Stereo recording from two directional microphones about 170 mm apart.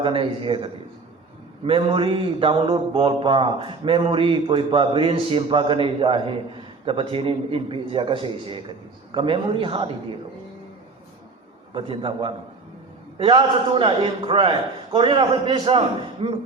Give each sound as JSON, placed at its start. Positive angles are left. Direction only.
{"t": 0.0, "sound": "mantra", "side_deg": -30}
{"t": 11.7, "sound": "mantra", "side_deg": -30}
{"t": 14.9, "sound": "a man's voice", "side_deg": -30}
{"t": 16.2, "sound": "mantra", "side_deg": -35}